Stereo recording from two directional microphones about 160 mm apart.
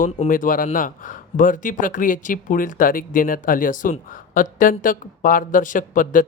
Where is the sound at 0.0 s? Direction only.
60° left (ahead or behind).